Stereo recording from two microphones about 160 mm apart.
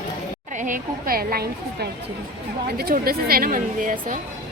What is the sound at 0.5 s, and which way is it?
A woman's voice, 55° right (ahead or behind).